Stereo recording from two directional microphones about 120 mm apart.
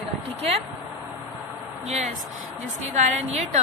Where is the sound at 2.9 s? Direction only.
80° right.